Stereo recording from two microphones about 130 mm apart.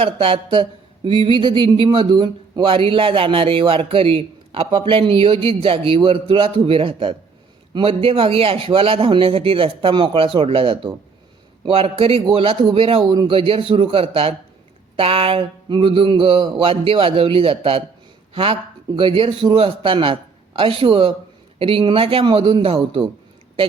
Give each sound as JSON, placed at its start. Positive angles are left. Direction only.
{"t": 0.0, "sound": "speech", "side_deg": -45}
{"t": 18.9, "sound": "speech", "side_deg": -40}